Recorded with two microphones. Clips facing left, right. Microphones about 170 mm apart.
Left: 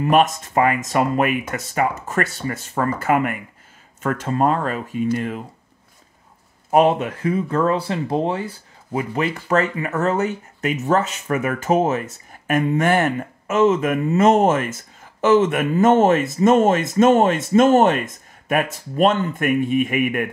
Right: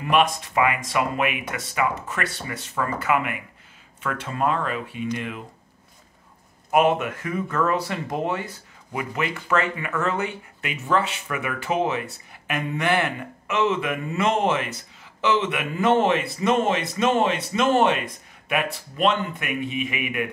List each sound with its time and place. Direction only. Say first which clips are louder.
0.0 s speech: left 4 dB; 45° left (ahead or behind)
6.7 s speech: left 4 dB; 35° left (ahead or behind)